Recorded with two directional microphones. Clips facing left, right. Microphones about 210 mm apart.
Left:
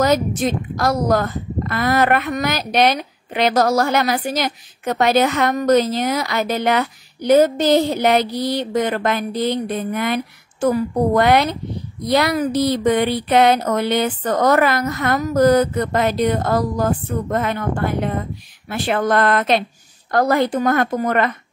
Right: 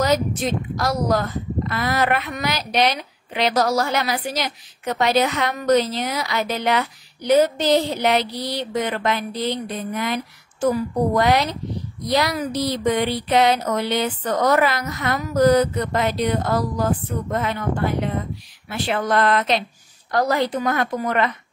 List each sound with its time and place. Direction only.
0.0 s a woman's voice: 50° left (ahead or behind)